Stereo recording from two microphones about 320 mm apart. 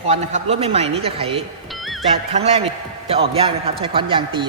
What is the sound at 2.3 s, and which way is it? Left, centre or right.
A man's voice, centre.